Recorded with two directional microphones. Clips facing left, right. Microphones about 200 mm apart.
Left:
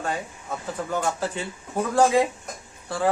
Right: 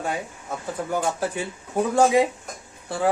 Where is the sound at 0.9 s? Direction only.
15° right (ahead or behind).